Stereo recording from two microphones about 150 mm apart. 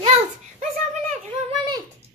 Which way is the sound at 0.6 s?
55° right (ahead or behind).